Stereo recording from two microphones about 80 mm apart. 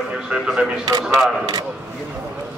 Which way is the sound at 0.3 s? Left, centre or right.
Centre.